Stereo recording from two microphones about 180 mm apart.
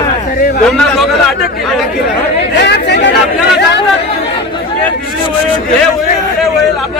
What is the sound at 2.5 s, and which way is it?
Speech, 70° left (ahead or behind).